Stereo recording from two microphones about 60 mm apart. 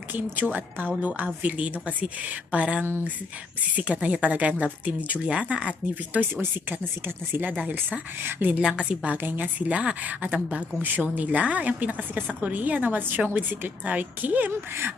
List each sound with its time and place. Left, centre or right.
0.1 s a woman's voice: right
5.9 s speech: right
7.5 s a woman's voice: right
8.2 s speech: right
8.6 s a woman's voice: centre
9.2 s a woman's voice: right